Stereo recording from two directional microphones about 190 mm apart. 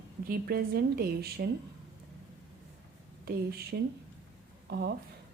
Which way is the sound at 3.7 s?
65° right (ahead or behind).